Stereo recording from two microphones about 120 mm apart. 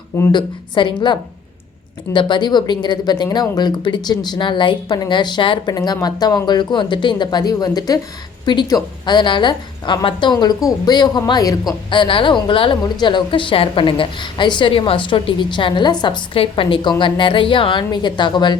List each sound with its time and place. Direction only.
0.3 s a woman's voice: 40° left (ahead or behind)
11.9 s a woman's voice: 45° left (ahead or behind)